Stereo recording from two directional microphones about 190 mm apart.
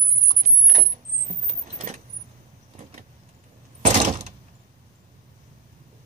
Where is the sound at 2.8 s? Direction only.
35° right (ahead or behind).